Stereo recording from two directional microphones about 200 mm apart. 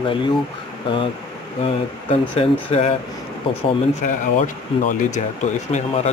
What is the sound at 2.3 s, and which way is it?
Speech, 30° left (ahead or behind).